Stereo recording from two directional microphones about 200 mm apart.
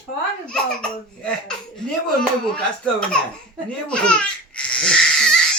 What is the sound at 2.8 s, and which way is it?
Speech, 5° left (ahead or behind).